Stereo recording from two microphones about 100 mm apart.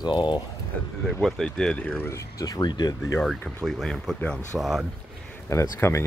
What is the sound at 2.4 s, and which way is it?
Speech, 45° left (ahead or behind).